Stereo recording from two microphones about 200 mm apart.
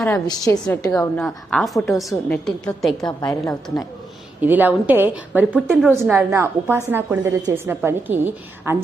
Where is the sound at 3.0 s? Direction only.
20° left (ahead or behind).